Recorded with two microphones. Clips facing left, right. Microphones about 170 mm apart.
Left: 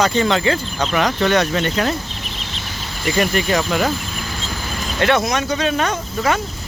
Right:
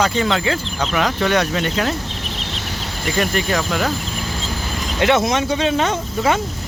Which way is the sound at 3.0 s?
5° left (ahead or behind).